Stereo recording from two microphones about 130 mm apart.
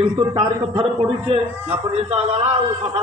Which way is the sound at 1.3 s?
45° right (ahead or behind).